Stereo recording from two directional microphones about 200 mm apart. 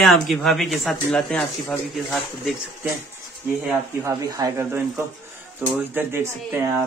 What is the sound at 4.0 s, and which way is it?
Speech, 15° right (ahead or behind).